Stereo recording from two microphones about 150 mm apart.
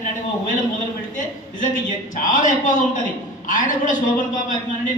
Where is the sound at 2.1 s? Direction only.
60° left (ahead or behind).